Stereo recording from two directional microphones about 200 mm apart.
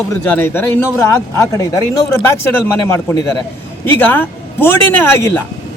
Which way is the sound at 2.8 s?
15° left (ahead or behind).